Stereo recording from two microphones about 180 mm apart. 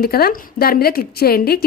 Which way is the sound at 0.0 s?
55° left (ahead or behind).